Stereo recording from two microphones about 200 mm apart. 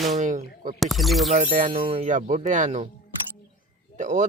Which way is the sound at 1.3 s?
40° right (ahead or behind).